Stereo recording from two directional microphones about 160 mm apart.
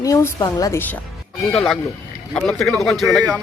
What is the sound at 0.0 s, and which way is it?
Speech, 20° left (ahead or behind).